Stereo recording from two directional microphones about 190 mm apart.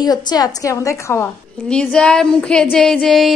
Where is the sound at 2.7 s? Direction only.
Centre (ahead or behind).